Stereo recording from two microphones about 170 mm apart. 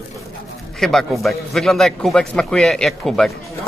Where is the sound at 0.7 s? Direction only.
Centre (ahead or behind).